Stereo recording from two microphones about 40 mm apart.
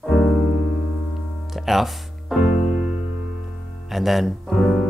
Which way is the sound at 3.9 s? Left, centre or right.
Centre.